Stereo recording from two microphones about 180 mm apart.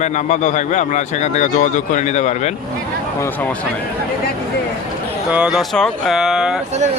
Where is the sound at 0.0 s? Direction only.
40° left (ahead or behind).